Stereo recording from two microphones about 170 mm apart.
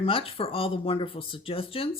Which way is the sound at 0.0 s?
35° left (ahead or behind).